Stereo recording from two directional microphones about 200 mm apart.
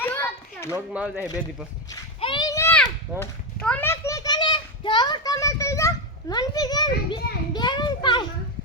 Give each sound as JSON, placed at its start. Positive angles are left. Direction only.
{"t": 0.0, "sound": "children playing", "side_deg": 10}
{"t": 0.7, "sound": "speech", "side_deg": -5}
{"t": 1.9, "sound": "a sound", "side_deg": 20}